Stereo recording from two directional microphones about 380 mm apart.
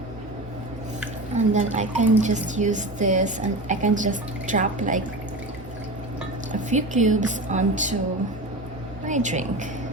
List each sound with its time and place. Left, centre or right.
1.4 s speech: centre
6.5 s speech: centre
9.0 s speech: centre